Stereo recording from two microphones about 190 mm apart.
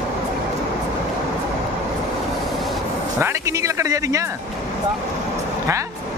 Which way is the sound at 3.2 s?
15° right (ahead or behind).